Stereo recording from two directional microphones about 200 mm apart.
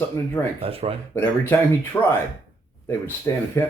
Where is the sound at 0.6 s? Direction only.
30° right (ahead or behind).